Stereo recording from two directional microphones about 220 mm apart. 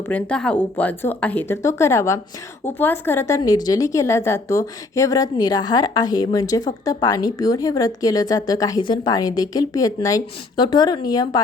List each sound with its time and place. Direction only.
0.1 s a woman's voice: 5° left (ahead or behind)